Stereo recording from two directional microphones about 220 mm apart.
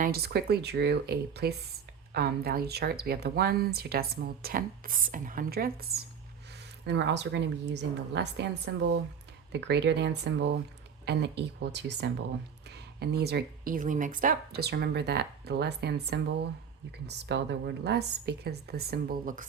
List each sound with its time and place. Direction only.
0.0 s speech: 45° right (ahead or behind)